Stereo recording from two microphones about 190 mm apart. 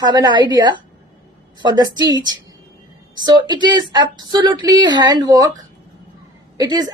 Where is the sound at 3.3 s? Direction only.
25° right (ahead or behind).